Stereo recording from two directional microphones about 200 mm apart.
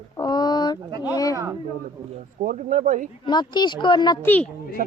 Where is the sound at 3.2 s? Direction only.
20° left (ahead or behind).